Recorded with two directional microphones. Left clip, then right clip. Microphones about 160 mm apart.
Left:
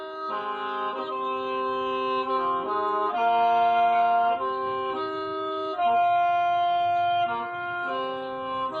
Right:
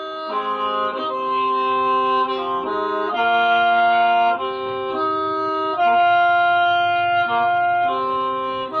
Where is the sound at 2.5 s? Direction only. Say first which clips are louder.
Right 4 dB; 20° right (ahead or behind).